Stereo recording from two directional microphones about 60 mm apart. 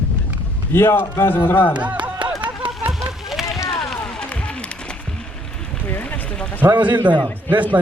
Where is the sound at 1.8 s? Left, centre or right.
Right.